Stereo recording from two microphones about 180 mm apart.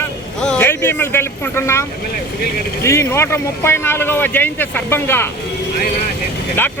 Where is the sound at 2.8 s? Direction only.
15° left (ahead or behind).